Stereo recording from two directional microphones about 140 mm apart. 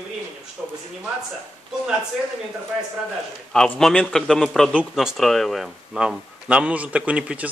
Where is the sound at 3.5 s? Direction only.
5° left (ahead or behind).